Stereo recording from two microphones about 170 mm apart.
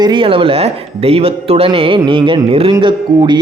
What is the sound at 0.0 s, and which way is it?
Speech, 30° right (ahead or behind).